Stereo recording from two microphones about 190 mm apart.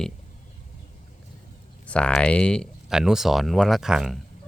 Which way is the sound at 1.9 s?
5° left (ahead or behind).